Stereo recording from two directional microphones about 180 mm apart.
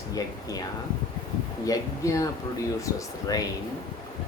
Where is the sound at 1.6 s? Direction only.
20° left (ahead or behind).